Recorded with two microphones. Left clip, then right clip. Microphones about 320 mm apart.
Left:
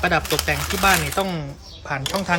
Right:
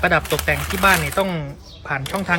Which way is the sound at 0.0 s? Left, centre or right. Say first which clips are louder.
Right 2 dB; centre.